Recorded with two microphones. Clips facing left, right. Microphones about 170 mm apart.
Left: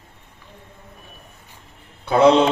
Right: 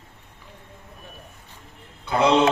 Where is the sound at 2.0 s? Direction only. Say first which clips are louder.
Left 7 dB; 55° left (ahead or behind).